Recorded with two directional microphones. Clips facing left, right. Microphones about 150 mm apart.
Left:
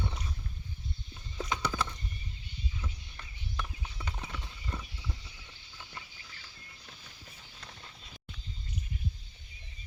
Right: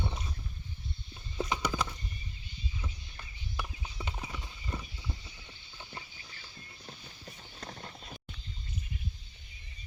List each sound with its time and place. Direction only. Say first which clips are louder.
0.0 s wild animals: right 1 dB; 20° right (ahead or behind)
1.4 s horse: right 1 dB; 15° right (ahead or behind)
4.2 s clip-clop: right 1 dB; 5° right (ahead or behind)
4.7 s horse: right 1 dB; 15° right (ahead or behind)
7.6 s clip-clop: right 8 dB; 45° right (ahead or behind)